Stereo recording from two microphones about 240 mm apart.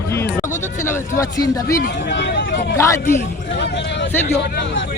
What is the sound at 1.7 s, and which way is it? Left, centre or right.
Speech, left.